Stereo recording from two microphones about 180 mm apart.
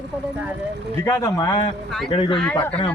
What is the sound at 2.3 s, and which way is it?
Speech, 5° left (ahead or behind).